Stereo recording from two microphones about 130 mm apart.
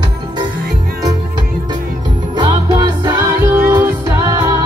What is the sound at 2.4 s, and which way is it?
Music, 30° right (ahead or behind).